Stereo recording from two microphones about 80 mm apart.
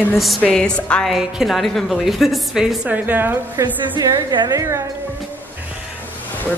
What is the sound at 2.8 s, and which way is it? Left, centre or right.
Speech, right.